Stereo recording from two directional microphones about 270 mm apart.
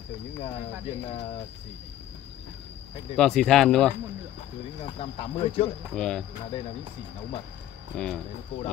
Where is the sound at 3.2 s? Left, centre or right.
Centre.